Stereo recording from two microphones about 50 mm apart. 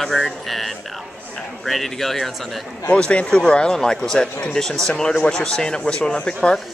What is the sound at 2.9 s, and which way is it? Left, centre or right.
Speech, left.